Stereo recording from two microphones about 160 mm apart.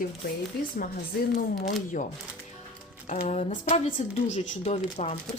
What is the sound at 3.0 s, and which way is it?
Speech, 50° left (ahead or behind).